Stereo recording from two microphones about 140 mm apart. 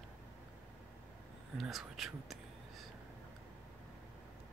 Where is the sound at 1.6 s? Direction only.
Centre (ahead or behind).